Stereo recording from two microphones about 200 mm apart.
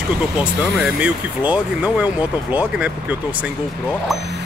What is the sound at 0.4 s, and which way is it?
Speech, 5° right (ahead or behind).